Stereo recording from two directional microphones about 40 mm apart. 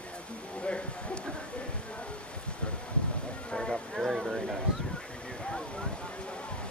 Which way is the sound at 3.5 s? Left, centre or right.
Centre.